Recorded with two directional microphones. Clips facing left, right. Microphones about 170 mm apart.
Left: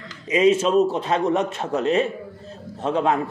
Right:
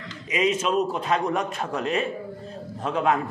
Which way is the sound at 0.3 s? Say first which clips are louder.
Left 6 dB; 30° left (ahead or behind).